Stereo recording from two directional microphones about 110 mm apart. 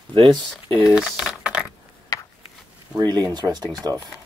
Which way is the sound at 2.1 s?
30° left (ahead or behind).